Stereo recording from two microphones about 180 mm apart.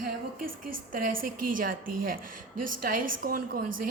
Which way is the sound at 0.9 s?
50° right (ahead or behind).